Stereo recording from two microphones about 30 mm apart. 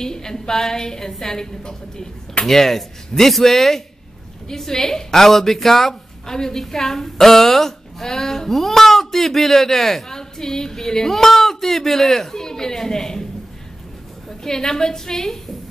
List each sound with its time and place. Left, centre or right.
0.0 s a woman's voice: centre
2.4 s speech: centre
14.4 s speech: centre